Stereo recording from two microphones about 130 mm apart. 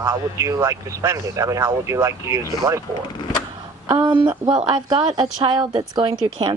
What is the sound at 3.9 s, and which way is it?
Speech, 30° right (ahead or behind).